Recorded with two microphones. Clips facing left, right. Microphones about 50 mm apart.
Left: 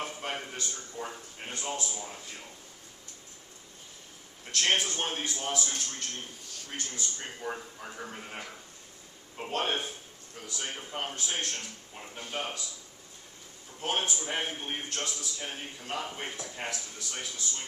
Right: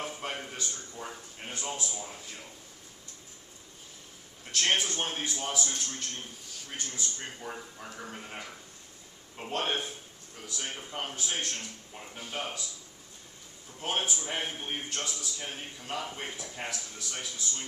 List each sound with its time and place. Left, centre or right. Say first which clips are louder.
0.0 s a man's voice: left 1 dB; centre
4.6 s a man's voice: even; centre
4.9 s a man's voice: even; centre
7.4 s a man's voice: left 3 dB; centre
9.4 s a man's voice: left 1 dB; centre
13.7 s a man's voice: left 1 dB; centre